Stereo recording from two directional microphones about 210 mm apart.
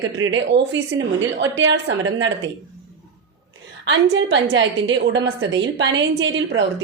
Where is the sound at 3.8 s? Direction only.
60° right (ahead or behind).